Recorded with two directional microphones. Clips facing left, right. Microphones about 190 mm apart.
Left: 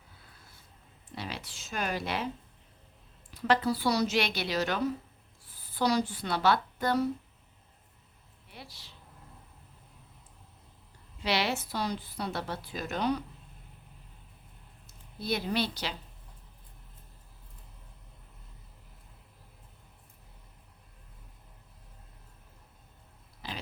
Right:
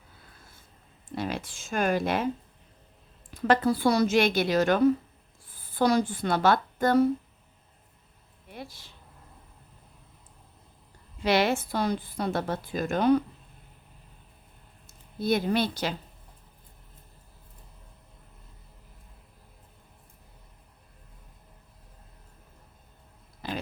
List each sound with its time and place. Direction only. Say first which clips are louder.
1.1 s speech: right 8 dB; 50° right (ahead or behind)
3.3 s a woman's voice: right 4 dB; 50° right (ahead or behind)
8.4 s speech: right 8 dB; 50° right (ahead or behind)
11.2 s a woman's voice: right 6 dB; 50° right (ahead or behind)
14.8 s a woman's voice: right 7 dB; 50° right (ahead or behind)
23.4 s a sound: right 7 dB; 50° right (ahead or behind)